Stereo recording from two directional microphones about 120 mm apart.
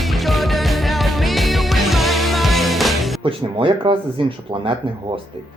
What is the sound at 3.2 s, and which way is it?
Speech, 50° right (ahead or behind).